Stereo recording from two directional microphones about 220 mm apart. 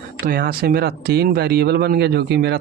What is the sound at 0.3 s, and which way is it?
Speech, 45° right (ahead or behind).